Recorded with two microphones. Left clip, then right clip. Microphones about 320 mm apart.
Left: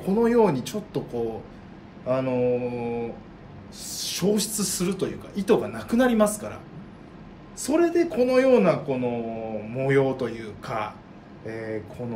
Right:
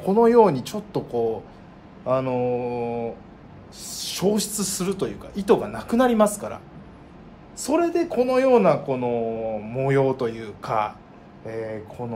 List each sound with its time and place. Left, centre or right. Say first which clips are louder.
0.0 s speech: right 5 dB; centre
7.6 s speech: even; centre